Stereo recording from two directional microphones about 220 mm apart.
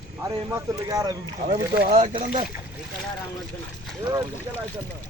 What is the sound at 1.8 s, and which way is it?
Speech, 40° right (ahead or behind).